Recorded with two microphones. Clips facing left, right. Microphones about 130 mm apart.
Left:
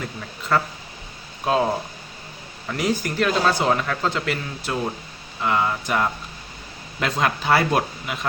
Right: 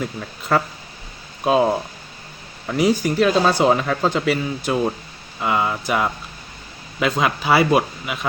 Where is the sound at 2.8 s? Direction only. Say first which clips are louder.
Right 5 dB; 15° right (ahead or behind).